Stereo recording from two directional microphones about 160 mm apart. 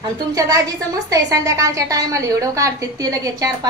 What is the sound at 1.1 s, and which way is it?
A woman's voice, 20° right (ahead or behind).